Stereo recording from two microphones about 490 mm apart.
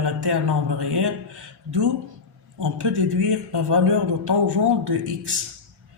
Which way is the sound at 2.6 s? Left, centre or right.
Right.